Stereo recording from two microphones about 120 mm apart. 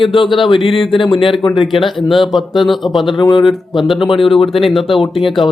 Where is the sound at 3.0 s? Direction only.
40° left (ahead or behind).